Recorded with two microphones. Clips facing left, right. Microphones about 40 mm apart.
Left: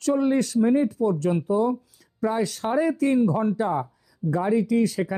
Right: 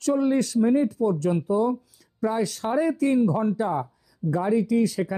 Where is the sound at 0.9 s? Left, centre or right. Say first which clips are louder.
Even; left.